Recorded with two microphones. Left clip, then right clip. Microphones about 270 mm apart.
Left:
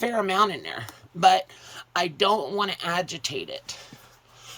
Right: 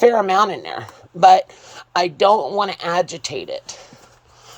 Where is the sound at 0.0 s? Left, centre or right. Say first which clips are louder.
Right 9 dB; centre.